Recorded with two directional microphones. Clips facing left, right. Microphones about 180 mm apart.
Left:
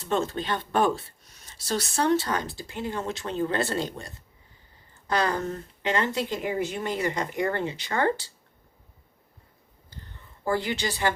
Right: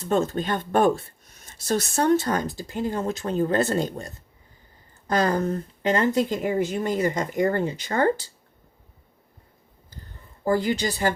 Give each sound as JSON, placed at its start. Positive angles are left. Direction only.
{"t": 0.0, "sound": "speech", "side_deg": -45}
{"t": 10.4, "sound": "speech", "side_deg": -40}